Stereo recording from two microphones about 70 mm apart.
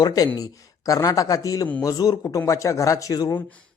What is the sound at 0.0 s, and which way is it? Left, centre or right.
Speech, left.